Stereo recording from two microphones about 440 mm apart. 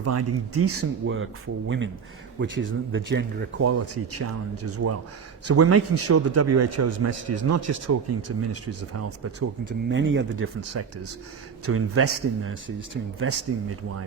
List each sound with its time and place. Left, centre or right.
0.0 s speech: right